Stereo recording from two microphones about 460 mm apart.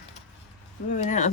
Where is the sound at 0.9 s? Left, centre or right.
Centre.